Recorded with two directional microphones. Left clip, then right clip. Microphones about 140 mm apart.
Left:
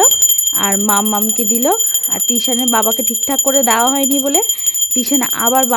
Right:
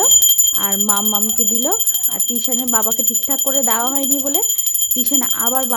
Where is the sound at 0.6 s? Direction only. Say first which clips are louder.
Left 4 dB; 50° left (ahead or behind).